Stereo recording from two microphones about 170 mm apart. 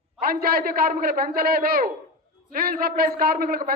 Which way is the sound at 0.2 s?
60° right (ahead or behind).